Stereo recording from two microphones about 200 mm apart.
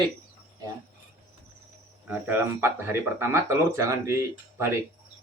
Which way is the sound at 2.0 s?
10° right (ahead or behind).